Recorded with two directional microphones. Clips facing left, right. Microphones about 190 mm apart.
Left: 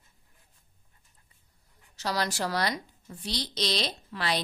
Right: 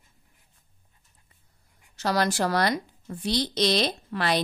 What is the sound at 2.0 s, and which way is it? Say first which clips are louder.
Speech: right 6 dB; 55° right (ahead or behind).